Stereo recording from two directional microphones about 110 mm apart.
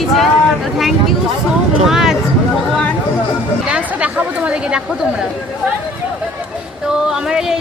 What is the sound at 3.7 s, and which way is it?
Speech, 10° right (ahead or behind).